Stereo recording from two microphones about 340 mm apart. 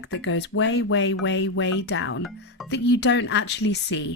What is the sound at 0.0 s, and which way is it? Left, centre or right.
Speech, left.